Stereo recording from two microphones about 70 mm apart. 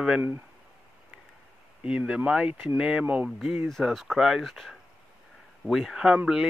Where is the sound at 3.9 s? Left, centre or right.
Centre.